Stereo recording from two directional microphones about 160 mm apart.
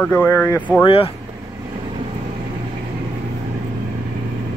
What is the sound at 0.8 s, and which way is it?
Speech, 35° left (ahead or behind).